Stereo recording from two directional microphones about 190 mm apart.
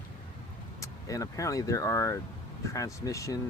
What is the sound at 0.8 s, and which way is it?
Speech, 20° left (ahead or behind).